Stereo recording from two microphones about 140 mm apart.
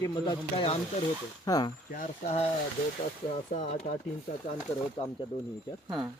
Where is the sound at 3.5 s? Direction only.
60° left (ahead or behind).